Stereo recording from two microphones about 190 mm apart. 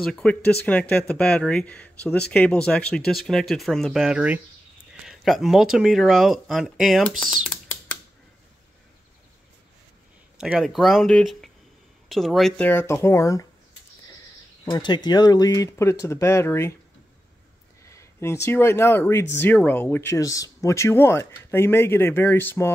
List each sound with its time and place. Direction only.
0.0 s speech: 5° left (ahead or behind)
7.4 s typing: 5° left (ahead or behind)
10.3 s speech: 5° right (ahead or behind); by 13.5 s 15° left (ahead or behind)
14.6 s speech: 20° left (ahead or behind)
17.8 s speech: 15° left (ahead or behind)